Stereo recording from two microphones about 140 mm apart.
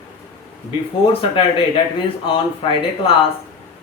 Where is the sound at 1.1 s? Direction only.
40° left (ahead or behind).